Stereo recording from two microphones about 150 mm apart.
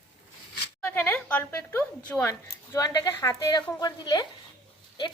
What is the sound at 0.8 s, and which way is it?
Speech, 10° left (ahead or behind).